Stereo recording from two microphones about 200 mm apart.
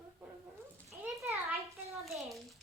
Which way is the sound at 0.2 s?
10° right (ahead or behind).